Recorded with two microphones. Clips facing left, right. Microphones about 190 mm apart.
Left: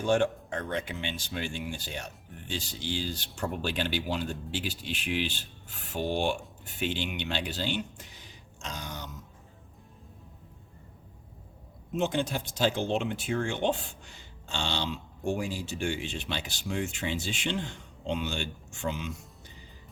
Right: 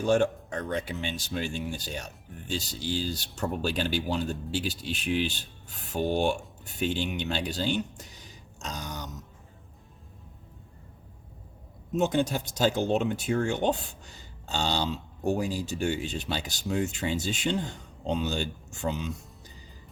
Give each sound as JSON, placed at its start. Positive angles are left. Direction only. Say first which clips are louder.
{"t": 0.0, "sound": "speech", "louder": "right 2 dB", "side_deg": -40}
{"t": 8.6, "sound": "grunt", "louder": "right 2 dB", "side_deg": -40}
{"t": 11.9, "sound": "speech", "louder": "right 3 dB", "side_deg": -45}